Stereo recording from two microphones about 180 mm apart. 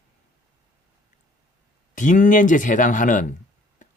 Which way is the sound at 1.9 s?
45° left (ahead or behind).